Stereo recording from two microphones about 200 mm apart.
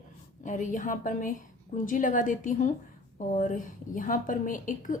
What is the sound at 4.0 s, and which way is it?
A woman's voice, 40° left (ahead or behind).